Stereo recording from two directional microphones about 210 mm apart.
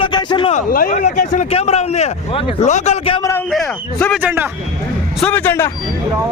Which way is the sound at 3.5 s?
5° left (ahead or behind).